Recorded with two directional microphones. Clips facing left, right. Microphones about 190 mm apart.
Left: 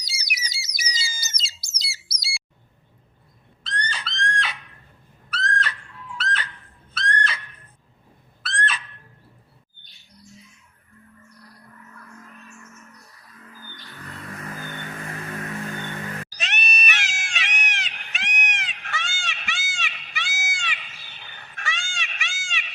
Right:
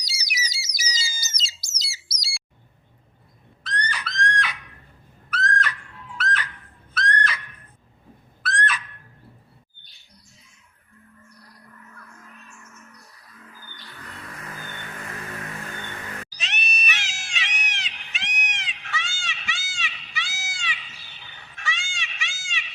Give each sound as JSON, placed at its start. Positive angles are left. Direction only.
{"t": 0.0, "sound": "bird", "side_deg": 55}
{"t": 3.6, "sound": "screaming", "side_deg": 25}
{"t": 5.3, "sound": "a sound", "side_deg": 25}
{"t": 16.3, "sound": "cat", "side_deg": 50}